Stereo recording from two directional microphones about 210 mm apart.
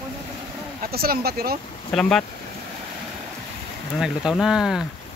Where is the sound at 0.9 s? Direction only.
45° right (ahead or behind).